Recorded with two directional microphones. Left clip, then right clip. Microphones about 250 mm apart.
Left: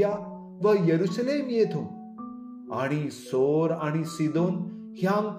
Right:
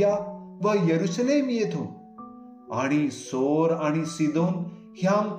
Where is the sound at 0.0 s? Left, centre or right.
Left.